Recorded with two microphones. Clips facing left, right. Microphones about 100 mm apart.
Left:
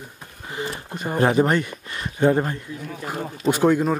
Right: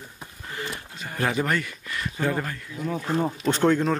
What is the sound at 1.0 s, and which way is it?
Speech, 35° left (ahead or behind).